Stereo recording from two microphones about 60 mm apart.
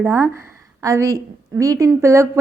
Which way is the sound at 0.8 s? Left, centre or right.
Right.